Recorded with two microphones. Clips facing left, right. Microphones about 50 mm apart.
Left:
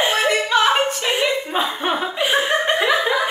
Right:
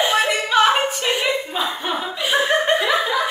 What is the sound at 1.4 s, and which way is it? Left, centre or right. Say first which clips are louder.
Speech: left 3 dB; left.